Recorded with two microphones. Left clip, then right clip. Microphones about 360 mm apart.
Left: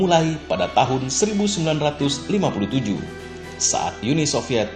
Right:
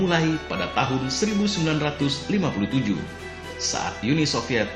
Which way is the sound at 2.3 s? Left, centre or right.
Centre.